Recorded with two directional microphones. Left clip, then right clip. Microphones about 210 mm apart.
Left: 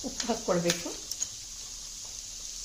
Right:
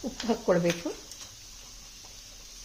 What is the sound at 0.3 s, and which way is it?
Speech, 45° right (ahead or behind).